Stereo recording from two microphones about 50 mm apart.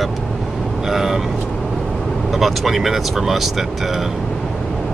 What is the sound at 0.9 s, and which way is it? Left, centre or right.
Speech, centre.